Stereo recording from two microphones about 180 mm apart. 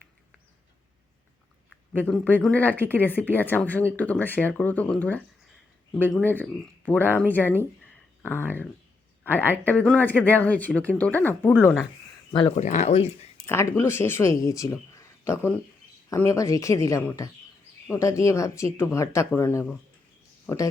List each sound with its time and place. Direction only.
1.9 s speech: 5° left (ahead or behind)
9.2 s speech: 10° right (ahead or behind)
9.6 s speech: 5° left (ahead or behind)
12.3 s speech: 30° left (ahead or behind)
12.5 s speech: 40° left (ahead or behind)
13.4 s speech: 15° left (ahead or behind)